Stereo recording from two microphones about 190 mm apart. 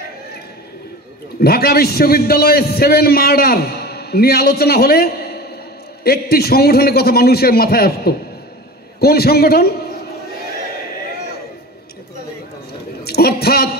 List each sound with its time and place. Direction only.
1.4 s a man's voice: 55° left (ahead or behind)
13.0 s a woman's voice: 55° left (ahead or behind)